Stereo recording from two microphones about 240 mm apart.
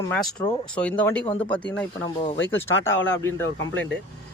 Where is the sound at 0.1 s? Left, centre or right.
Centre.